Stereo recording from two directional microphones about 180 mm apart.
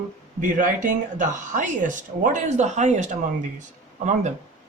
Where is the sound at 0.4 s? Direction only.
45° right (ahead or behind).